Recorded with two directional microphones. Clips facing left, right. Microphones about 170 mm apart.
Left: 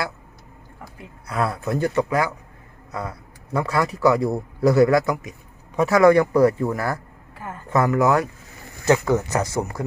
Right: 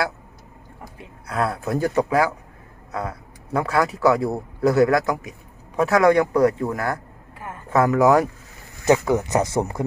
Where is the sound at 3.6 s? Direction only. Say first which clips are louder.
Even; centre (ahead or behind).